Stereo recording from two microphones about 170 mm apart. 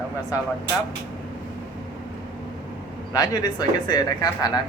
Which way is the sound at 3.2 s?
25° left (ahead or behind).